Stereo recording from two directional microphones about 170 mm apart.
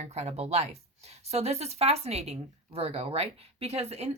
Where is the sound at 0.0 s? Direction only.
40° right (ahead or behind).